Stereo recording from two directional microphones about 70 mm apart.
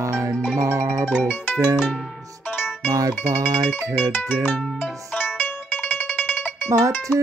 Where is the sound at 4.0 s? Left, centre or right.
Left.